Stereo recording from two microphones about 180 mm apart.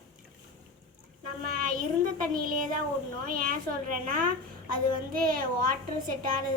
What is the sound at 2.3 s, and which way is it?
A woman's voice, 50° right (ahead or behind).